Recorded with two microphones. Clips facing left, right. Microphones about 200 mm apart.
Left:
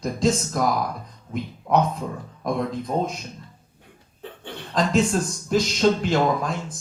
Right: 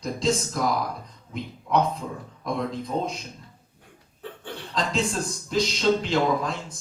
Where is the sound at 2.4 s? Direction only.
50° left (ahead or behind).